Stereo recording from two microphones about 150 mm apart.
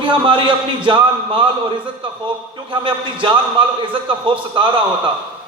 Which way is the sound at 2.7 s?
35° right (ahead or behind).